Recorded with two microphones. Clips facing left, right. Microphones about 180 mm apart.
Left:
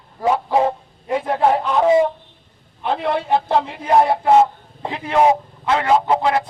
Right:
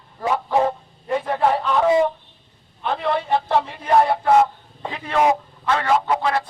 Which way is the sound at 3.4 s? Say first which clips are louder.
Left 2 dB; 20° left (ahead or behind).